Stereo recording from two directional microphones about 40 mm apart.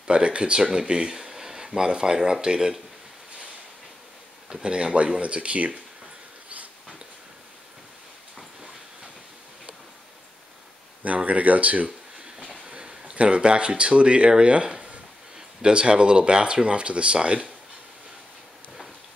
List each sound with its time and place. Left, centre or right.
0.0 s speech: right
0.6 s speech: centre
1.2 s a sound: centre
1.7 s speech: right
4.5 s speech: right
11.1 s speech: right
12.6 s speech: right